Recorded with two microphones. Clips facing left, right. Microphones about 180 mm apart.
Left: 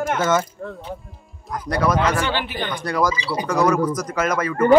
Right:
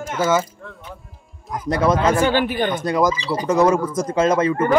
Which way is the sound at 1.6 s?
25° right (ahead or behind).